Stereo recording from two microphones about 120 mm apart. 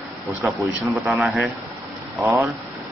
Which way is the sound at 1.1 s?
10° right (ahead or behind).